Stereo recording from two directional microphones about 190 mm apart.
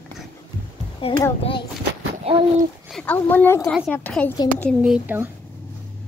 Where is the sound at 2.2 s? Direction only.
30° right (ahead or behind).